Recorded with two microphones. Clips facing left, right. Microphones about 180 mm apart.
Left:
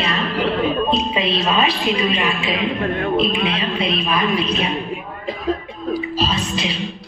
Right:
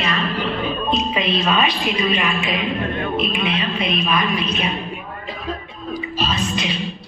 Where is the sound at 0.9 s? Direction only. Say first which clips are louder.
Left 1 dB; 30° left (ahead or behind).